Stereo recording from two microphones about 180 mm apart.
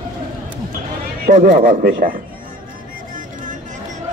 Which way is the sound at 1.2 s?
50° right (ahead or behind).